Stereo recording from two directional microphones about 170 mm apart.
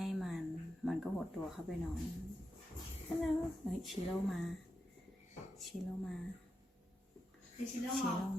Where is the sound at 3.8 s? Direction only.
Centre (ahead or behind).